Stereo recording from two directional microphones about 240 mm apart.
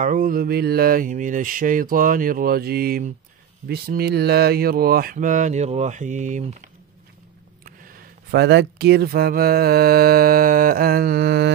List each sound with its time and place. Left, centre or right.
0.0 s speech: right